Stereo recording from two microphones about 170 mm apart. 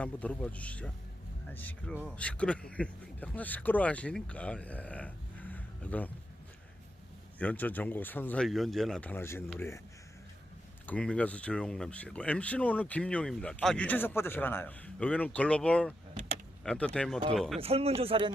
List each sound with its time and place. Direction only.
0.0 s speech: 10° left (ahead or behind)
7.3 s speech: 10° left (ahead or behind)
10.8 s speech: 5° left (ahead or behind)
17.6 s speech: 35° right (ahead or behind)